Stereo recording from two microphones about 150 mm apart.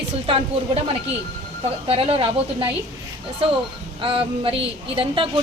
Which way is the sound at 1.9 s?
40° right (ahead or behind).